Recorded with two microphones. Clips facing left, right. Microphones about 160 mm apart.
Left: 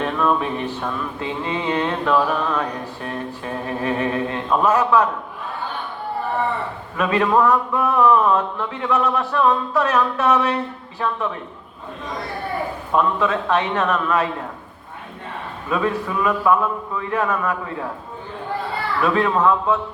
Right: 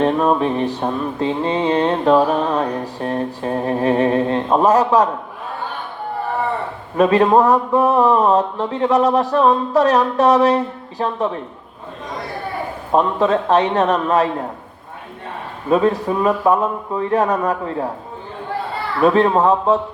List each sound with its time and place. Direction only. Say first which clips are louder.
0.0 s mantra: right 5 dB; 35° right (ahead or behind)
6.9 s mantra: right 6 dB; 35° right (ahead or behind)
12.9 s mantra: right 4 dB; 35° right (ahead or behind)
15.7 s mantra: right 6 dB; 35° right (ahead or behind)
19.0 s mantra: right 5 dB; 35° right (ahead or behind)